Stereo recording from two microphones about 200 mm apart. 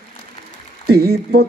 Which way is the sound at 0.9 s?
50° right (ahead or behind).